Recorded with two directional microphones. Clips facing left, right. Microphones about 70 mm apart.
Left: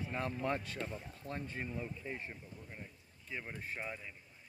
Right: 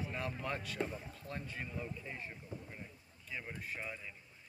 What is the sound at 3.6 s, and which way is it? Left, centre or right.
Speech, left.